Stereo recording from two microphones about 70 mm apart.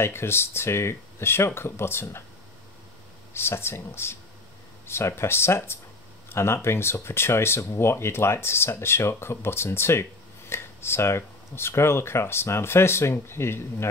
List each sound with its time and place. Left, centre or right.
0.0 s speech: left
3.3 s speech: left